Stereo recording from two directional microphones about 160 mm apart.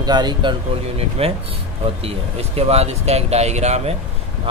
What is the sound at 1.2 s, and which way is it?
A man's voice, 40° right (ahead or behind).